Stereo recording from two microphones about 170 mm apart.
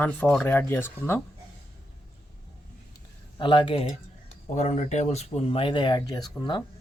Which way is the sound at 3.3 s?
30° left (ahead or behind).